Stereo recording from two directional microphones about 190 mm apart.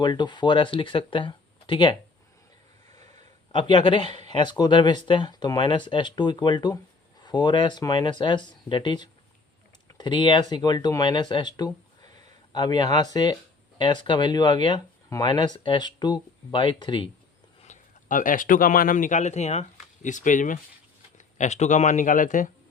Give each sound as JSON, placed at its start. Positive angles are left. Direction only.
{"t": 0.0, "sound": "speech", "side_deg": 25}
{"t": 2.9, "sound": "a sound", "side_deg": -35}
{"t": 3.5, "sound": "speech", "side_deg": 25}
{"t": 17.6, "sound": "a man's voice", "side_deg": 40}